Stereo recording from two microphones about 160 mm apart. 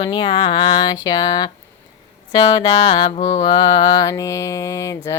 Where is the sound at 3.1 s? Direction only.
50° left (ahead or behind).